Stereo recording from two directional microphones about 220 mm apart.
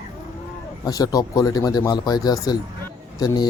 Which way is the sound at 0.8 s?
15° left (ahead or behind).